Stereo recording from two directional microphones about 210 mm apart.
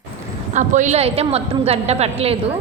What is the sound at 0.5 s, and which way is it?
A woman's voice, 35° right (ahead or behind).